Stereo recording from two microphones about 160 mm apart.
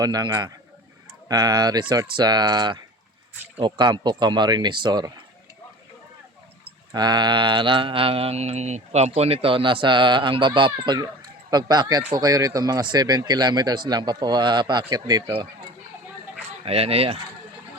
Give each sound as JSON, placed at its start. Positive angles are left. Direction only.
{"t": 0.0, "sound": "speech", "side_deg": -25}
{"t": 6.9, "sound": "mantra", "side_deg": -25}
{"t": 11.5, "sound": "speech", "side_deg": -25}
{"t": 16.6, "sound": "mantra", "side_deg": -40}